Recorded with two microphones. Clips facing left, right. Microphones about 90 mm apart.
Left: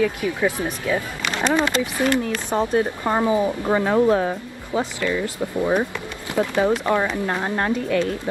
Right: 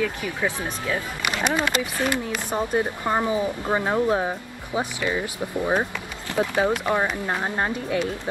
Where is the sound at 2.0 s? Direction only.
15° right (ahead or behind).